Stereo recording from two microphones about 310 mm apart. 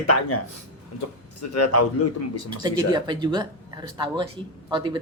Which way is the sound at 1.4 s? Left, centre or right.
Left.